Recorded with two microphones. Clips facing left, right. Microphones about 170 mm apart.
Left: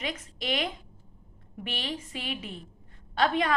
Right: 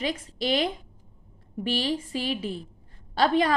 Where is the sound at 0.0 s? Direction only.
30° right (ahead or behind).